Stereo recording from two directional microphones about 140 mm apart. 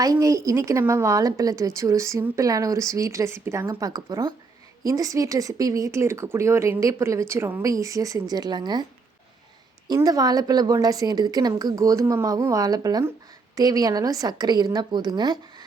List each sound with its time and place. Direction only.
0.0 s a woman's voice: 25° right (ahead or behind)